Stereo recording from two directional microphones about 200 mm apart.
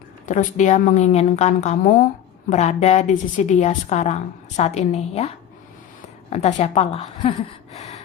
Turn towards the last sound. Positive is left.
turn(degrees=35)  # may be behind; listen again after turning